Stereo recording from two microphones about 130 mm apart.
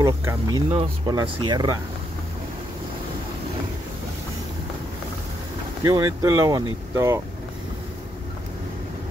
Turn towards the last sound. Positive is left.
turn(degrees=-25)  # may be behind; listen again after turning